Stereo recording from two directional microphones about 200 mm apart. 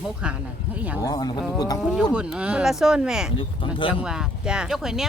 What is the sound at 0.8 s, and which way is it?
Speech, 10° right (ahead or behind).